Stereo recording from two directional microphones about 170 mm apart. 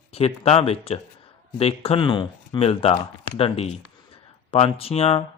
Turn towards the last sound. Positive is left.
turn(degrees=35)  # may be behind; listen again after turning